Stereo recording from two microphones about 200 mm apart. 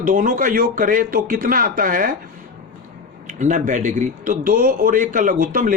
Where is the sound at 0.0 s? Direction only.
40° right (ahead or behind).